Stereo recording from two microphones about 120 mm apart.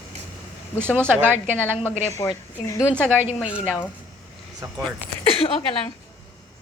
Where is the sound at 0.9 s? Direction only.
15° right (ahead or behind).